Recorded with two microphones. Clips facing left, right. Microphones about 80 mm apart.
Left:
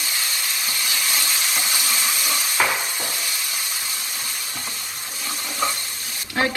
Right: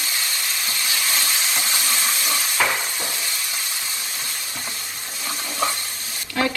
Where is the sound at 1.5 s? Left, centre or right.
Centre.